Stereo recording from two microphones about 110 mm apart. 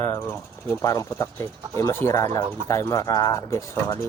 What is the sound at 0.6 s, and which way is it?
Speech, 30° left (ahead or behind).